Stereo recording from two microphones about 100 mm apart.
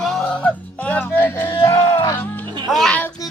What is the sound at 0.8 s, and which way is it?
Music, 15° left (ahead or behind).